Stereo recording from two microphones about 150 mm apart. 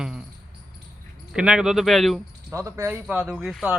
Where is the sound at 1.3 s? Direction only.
5° right (ahead or behind).